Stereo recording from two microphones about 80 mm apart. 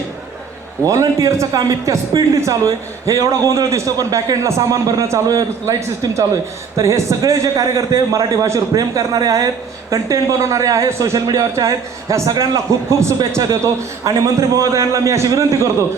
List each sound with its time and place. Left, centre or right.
0.9 s a man's voice: right